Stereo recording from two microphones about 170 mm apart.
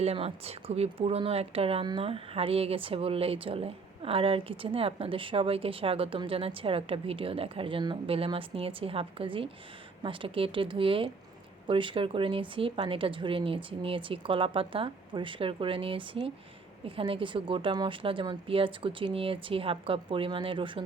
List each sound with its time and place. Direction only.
0.0 s speech: 35° right (ahead or behind)